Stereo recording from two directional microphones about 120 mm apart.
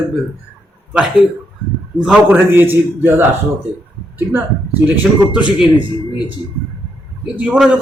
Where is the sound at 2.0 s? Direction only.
5° right (ahead or behind).